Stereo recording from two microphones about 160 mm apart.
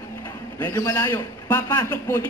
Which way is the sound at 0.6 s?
20° left (ahead or behind).